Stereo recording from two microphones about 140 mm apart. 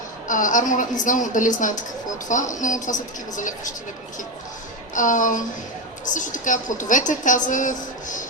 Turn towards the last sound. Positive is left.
turn(degrees=65)  # may be behind; listen again after turning